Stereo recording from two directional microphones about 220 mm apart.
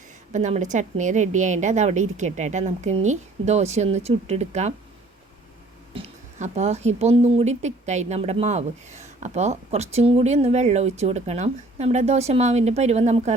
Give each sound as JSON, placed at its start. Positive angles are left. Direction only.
{"t": 0.3, "sound": "a woman's voice", "side_deg": -30}
{"t": 5.9, "sound": "speech", "side_deg": -30}